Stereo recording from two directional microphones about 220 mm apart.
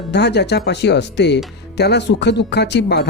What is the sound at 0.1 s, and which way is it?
Speech, 50° left (ahead or behind).